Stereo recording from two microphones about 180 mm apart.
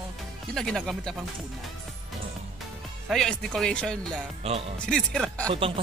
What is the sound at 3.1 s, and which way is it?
Speech, centre (ahead or behind).